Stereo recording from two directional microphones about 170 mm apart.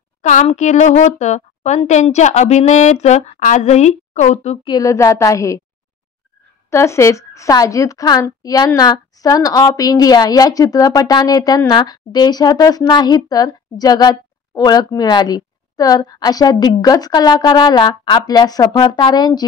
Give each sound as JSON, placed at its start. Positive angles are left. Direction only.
{"t": 0.2, "sound": "a woman's voice", "side_deg": 45}
{"t": 4.6, "sound": "a woman's voice", "side_deg": 20}
{"t": 6.7, "sound": "a woman's voice", "side_deg": 15}